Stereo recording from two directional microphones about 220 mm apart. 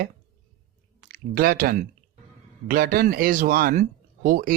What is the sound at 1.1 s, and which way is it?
Speech, 40° right (ahead or behind).